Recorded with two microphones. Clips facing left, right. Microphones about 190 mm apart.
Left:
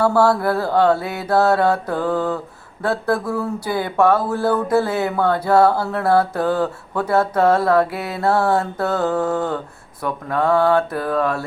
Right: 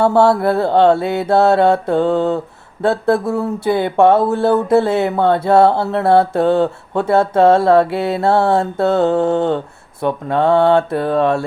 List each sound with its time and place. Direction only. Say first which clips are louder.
0.0 s speech: right 4 dB; 25° right (ahead or behind)